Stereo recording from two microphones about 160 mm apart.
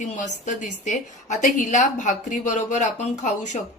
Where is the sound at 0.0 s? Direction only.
50° left (ahead or behind).